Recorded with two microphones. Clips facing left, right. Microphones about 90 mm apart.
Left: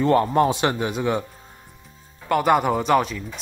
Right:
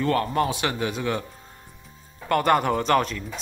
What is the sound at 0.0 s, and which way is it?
A man's voice, 20° left (ahead or behind).